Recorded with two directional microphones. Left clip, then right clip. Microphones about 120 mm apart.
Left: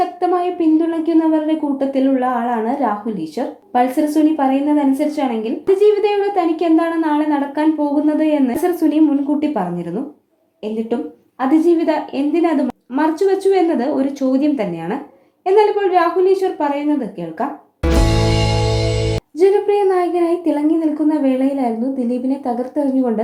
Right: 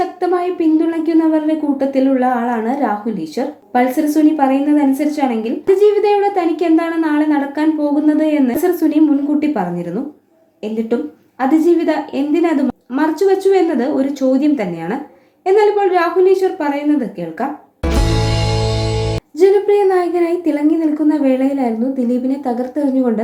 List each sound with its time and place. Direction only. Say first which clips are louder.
0.0 s a woman's voice: even; 35° left (ahead or behind)
11.3 s a woman's voice: right 1 dB; 30° left (ahead or behind)
17.8 s music: left 2 dB; centre (ahead or behind)
19.4 s a woman's voice: right 2 dB; 25° left (ahead or behind)